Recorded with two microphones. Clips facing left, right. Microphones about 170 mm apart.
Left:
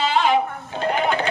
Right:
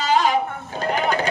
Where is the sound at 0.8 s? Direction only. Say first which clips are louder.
Left 1 dB; 40° right (ahead or behind).